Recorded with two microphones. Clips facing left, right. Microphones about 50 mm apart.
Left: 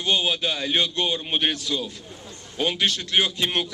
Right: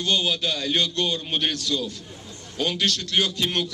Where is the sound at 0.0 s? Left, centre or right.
Centre.